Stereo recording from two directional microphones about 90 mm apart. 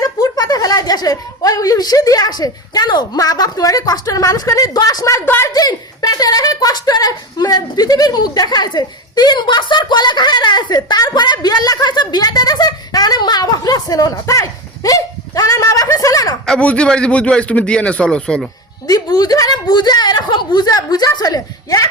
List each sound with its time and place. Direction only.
0.0 s speech: 45° left (ahead or behind)
5.2 s a woman's voice: 25° left (ahead or behind)
5.5 s speech: 45° left (ahead or behind)
16.5 s a man's voice: 10° left (ahead or behind)
18.9 s speech: 45° left (ahead or behind)